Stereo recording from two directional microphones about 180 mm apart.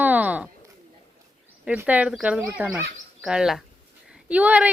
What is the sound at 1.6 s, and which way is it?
Speech, 5° right (ahead or behind).